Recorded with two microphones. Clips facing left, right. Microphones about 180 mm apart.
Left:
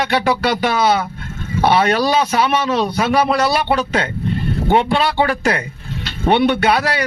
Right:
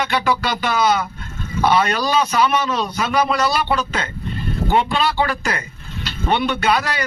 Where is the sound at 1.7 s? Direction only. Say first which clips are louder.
Left 3 dB; 65° left (ahead or behind).